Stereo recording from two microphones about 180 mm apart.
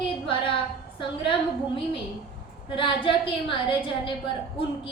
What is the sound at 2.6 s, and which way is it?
A woman's voice, 30° left (ahead or behind).